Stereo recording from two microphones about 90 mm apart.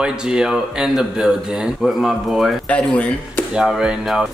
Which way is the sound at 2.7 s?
15° left (ahead or behind).